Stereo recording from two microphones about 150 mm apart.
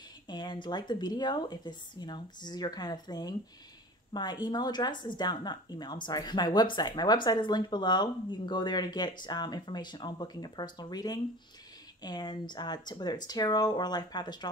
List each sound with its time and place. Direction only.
0.3 s speech: 30° left (ahead or behind)